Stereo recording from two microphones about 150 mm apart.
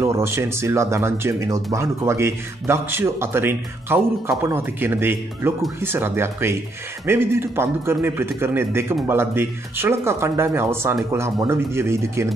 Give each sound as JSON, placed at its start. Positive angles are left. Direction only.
{"t": 0.0, "sound": "speech", "side_deg": -20}